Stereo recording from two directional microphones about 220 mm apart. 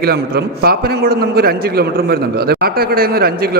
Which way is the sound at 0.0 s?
45° right (ahead or behind).